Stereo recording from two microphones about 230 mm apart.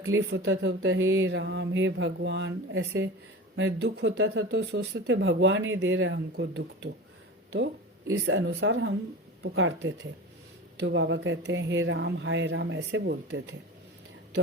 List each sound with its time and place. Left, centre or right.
0.1 s speech: right
8.1 s speech: right